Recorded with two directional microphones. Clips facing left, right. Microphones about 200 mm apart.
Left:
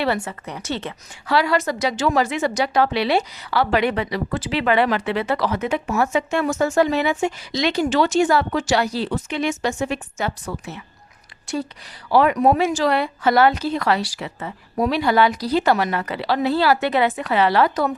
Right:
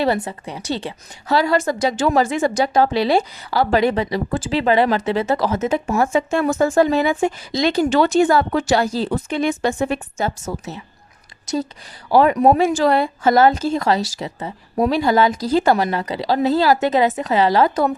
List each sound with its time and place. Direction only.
0.0 s a woman's voice: 40° right (ahead or behind)
1.4 s a woman's voice: 45° right (ahead or behind)
5.8 s a woman's voice: 35° right (ahead or behind)
12.5 s a woman's voice: 50° right (ahead or behind)